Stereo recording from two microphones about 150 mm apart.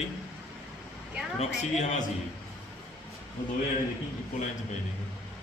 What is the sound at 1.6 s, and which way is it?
Speech, 50° left (ahead or behind).